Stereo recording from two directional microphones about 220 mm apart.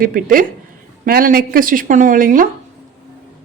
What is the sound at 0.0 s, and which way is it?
Speech, 40° right (ahead or behind).